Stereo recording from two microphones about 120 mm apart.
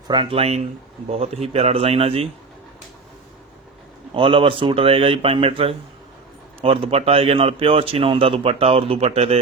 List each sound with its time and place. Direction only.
0.1 s a man's voice: 45° right (ahead or behind)
4.1 s a man's voice: 45° right (ahead or behind)